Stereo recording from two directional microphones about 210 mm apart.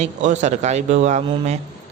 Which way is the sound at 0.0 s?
35° right (ahead or behind).